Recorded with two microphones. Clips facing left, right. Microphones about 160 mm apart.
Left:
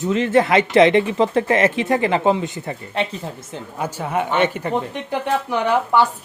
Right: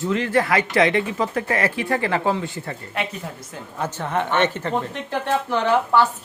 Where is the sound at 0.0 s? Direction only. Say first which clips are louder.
Left 4 dB; 20° left (ahead or behind).